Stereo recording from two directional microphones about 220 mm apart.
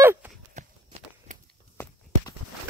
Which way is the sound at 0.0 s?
10° right (ahead or behind).